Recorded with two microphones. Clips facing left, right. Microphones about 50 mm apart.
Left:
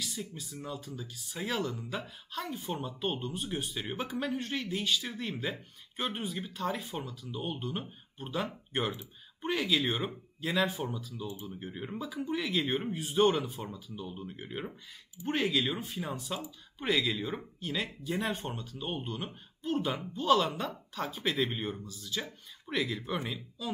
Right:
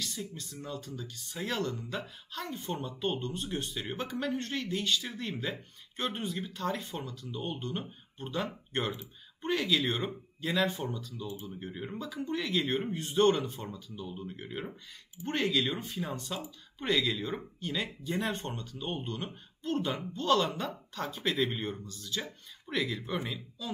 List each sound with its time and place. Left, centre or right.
0.0 s speech: centre